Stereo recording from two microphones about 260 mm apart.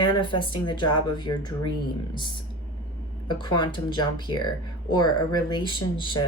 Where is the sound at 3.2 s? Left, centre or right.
Centre.